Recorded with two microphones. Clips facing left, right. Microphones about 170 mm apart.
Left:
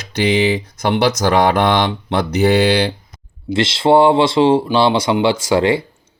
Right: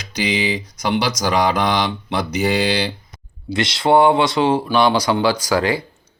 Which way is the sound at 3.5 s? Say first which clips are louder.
Left 3 dB; 25° left (ahead or behind).